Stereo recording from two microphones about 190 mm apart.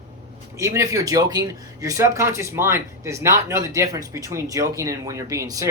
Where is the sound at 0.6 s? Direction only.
15° right (ahead or behind).